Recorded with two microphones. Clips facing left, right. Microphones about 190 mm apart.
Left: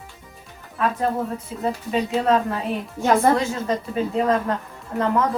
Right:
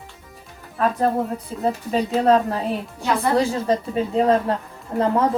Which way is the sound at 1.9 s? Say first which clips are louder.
Right 3 dB; 35° right (ahead or behind).